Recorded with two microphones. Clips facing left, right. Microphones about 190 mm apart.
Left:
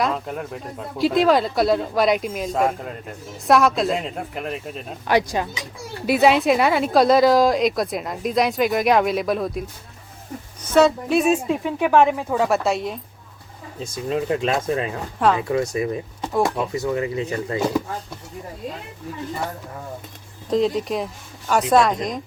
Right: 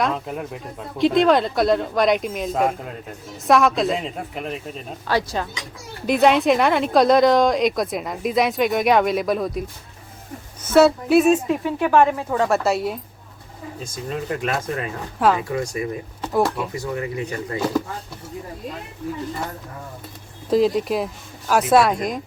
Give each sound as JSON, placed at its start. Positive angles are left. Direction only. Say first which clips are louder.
{"t": 0.0, "sound": "speech", "louder": "even", "side_deg": 0}
{"t": 5.0, "sound": "speech", "louder": "left 3 dB", "side_deg": 15}
{"t": 6.1, "sound": "speech", "louder": "even", "side_deg": 0}
{"t": 10.8, "sound": "speech", "louder": "right 2 dB", "side_deg": -5}
{"t": 11.3, "sound": "speech", "louder": "right 2 dB", "side_deg": 10}
{"t": 13.9, "sound": "speech", "louder": "left 5 dB", "side_deg": 25}
{"t": 20.5, "sound": "speech", "louder": "right 2 dB", "side_deg": -5}